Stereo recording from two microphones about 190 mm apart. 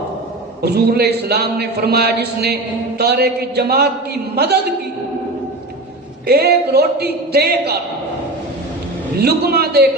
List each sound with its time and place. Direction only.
0.6 s a man's voice: 60° right (ahead or behind)
6.2 s a man's voice: 55° right (ahead or behind)
9.1 s a man's voice: 55° right (ahead or behind)